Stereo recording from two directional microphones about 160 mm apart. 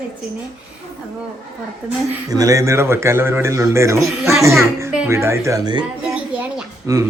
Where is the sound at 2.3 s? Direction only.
20° right (ahead or behind).